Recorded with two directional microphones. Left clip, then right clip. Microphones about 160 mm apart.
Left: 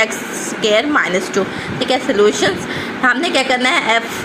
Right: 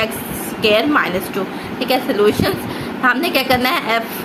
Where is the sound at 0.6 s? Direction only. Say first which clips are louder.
Even; 35° left (ahead or behind).